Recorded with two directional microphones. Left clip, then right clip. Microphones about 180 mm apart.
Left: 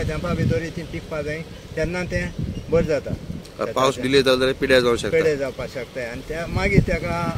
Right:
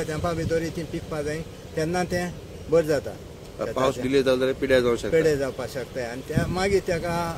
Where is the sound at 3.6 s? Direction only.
45° left (ahead or behind).